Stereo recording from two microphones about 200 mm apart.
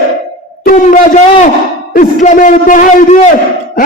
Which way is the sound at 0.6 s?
40° left (ahead or behind).